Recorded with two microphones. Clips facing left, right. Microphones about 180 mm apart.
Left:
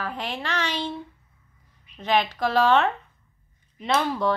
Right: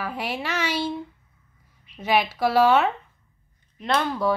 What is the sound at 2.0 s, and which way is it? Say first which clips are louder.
Speech: right 1 dB; 10° right (ahead or behind).